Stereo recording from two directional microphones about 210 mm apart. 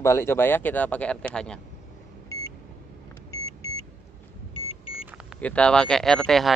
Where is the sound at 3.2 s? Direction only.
15° left (ahead or behind).